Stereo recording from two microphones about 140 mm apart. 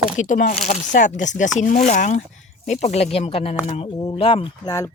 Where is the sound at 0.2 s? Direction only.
70° left (ahead or behind).